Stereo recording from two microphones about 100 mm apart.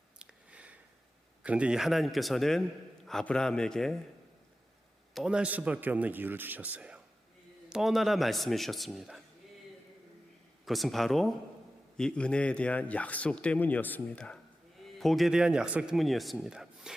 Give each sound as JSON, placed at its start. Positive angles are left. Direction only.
{"t": 0.2, "sound": "a sound", "side_deg": -15}
{"t": 1.5, "sound": "speech", "side_deg": -10}
{"t": 5.1, "sound": "speech", "side_deg": -5}
{"t": 7.7, "sound": "speech", "side_deg": 0}
{"t": 10.7, "sound": "a man's voice", "side_deg": 0}
{"t": 14.9, "sound": "speech", "side_deg": 0}